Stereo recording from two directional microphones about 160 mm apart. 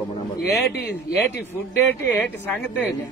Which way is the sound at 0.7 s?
90° left.